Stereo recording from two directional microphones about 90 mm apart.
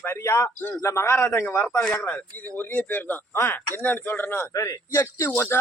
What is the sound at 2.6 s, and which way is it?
Speech, 20° left (ahead or behind).